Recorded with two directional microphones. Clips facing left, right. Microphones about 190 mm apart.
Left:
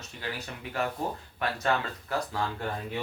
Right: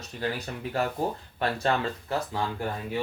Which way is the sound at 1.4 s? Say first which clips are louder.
Right 3 dB; 30° right (ahead or behind).